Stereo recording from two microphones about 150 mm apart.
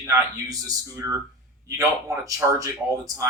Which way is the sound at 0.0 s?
20° right (ahead or behind).